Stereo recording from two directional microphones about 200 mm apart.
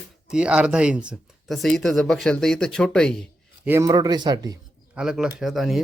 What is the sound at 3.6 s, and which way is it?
Speech, 10° right (ahead or behind).